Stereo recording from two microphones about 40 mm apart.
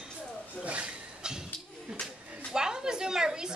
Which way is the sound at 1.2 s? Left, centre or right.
Centre.